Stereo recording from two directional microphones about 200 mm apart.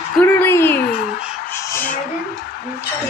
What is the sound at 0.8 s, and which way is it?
Crow, 50° left (ahead or behind).